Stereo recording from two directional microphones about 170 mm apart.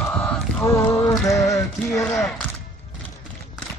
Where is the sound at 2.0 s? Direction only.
5° left (ahead or behind).